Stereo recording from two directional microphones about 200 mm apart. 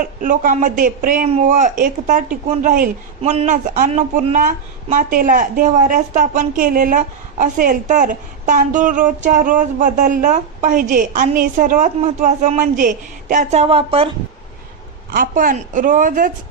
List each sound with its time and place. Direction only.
0.0 s speech: 40° right (ahead or behind)
3.2 s speech: 30° right (ahead or behind)
15.1 s speech: 45° right (ahead or behind)